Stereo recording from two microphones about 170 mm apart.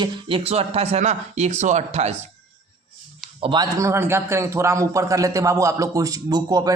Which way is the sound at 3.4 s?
25° right (ahead or behind).